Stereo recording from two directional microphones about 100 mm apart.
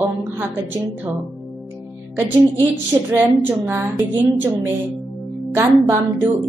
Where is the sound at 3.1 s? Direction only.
15° right (ahead or behind).